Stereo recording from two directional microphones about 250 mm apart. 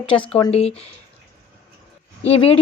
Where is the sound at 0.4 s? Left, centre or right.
Left.